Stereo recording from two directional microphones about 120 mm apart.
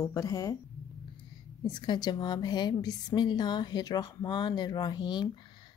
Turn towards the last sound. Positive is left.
turn(degrees=40)  # may be behind; listen again after turning